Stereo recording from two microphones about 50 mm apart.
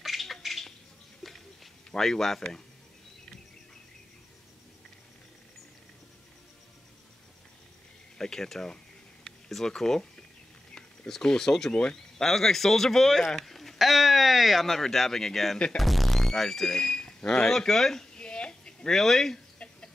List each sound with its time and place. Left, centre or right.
0.0 s bird: centre
1.2 s a sound: centre
1.9 s speech: centre
8.2 s speech: centre
9.2 s a sound: centre
9.7 s speech: centre
13.5 s speech: centre
18.1 s a sound: centre
18.9 s speech: centre